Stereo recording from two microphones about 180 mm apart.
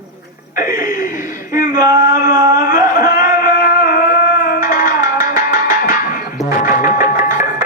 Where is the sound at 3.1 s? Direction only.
50° left (ahead or behind).